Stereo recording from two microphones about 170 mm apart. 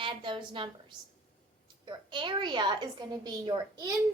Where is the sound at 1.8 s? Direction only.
25° right (ahead or behind).